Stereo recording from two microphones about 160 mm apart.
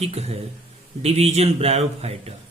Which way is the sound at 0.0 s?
40° right (ahead or behind).